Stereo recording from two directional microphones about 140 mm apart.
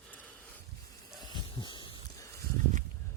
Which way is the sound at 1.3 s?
35° left (ahead or behind).